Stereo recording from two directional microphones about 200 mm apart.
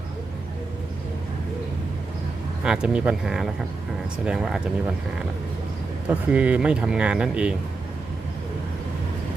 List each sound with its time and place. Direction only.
2.6 s speech: 5° right (ahead or behind)
6.1 s speech: 5° right (ahead or behind)